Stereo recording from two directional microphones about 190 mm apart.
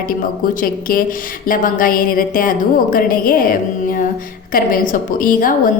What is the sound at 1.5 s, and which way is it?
A woman's voice, 45° left (ahead or behind).